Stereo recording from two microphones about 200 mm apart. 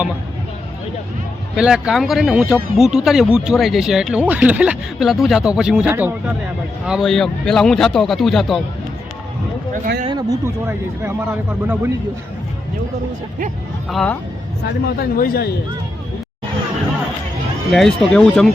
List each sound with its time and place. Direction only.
1.5 s speech: 5° right (ahead or behind)
9.7 s speech: 45° right (ahead or behind)
10.1 s a man's voice: 20° right (ahead or behind)
13.9 s speech: 5° left (ahead or behind)
15.2 s a man's voice: 50° left (ahead or behind)
17.7 s speech: centre (ahead or behind)